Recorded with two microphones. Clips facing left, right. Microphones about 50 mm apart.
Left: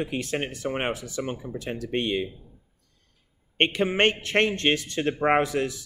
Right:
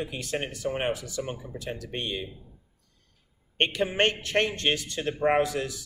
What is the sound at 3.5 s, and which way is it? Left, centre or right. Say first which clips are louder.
A man's voice: left 3 dB; left.